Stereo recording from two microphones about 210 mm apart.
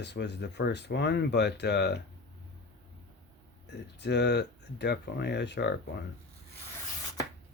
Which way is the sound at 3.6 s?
55° left (ahead or behind).